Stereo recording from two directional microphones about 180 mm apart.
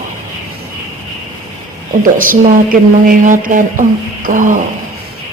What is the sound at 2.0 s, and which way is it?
A woman's voice, 50° right (ahead or behind).